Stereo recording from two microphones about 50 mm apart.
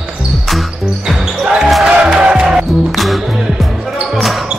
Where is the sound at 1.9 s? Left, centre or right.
Right.